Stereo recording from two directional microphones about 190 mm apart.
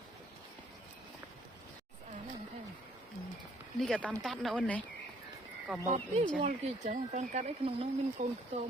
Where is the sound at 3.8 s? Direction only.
5° left (ahead or behind).